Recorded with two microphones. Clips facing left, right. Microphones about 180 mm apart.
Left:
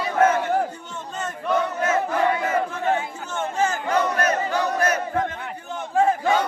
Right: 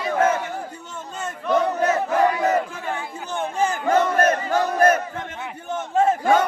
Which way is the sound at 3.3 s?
15° right (ahead or behind).